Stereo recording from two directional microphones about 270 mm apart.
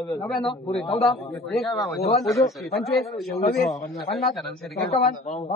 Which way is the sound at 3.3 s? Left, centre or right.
Left.